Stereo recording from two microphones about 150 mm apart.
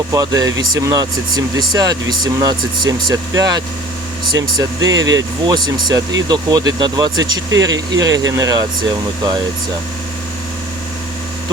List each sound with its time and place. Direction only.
0.1 s speech: 25° right (ahead or behind)